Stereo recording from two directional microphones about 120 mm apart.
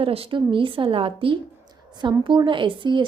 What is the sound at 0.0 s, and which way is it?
A woman's voice, 50° right (ahead or behind).